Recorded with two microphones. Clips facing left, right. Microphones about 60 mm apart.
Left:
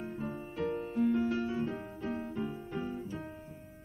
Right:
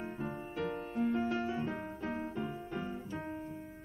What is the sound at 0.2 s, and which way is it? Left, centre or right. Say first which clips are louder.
Music: left 2 dB; centre.